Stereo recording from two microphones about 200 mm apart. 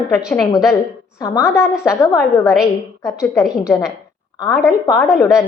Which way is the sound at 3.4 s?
5° right (ahead or behind).